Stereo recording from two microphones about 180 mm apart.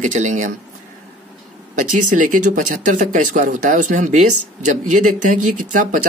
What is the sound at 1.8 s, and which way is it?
Speech, 45° right (ahead or behind).